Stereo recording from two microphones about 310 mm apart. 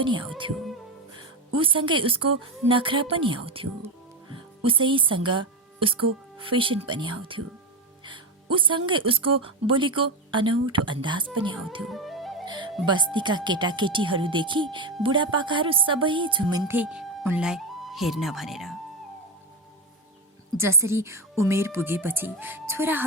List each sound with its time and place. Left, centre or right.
0.0 s a woman's voice: centre
1.5 s a woman's voice: centre
8.0 s music: centre
8.9 s a woman's voice: centre
11.9 s music: centre
12.5 s music: centre
12.8 s a woman's voice: centre
20.6 s a woman's voice: centre